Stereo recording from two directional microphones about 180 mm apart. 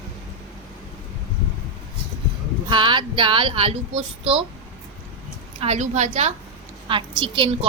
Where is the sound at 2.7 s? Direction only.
25° right (ahead or behind).